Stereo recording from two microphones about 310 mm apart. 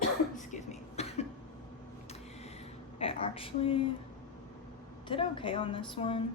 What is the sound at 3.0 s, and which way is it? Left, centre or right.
Speech, centre.